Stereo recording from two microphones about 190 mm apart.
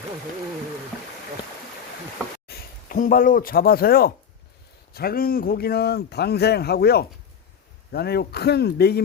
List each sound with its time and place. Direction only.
2.5 s speech: 50° left (ahead or behind)